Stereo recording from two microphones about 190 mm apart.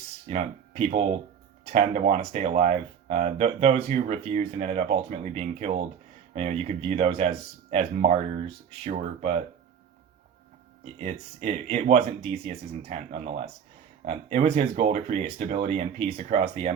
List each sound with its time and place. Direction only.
0.3 s speech: 30° right (ahead or behind)
11.0 s speech: 35° right (ahead or behind)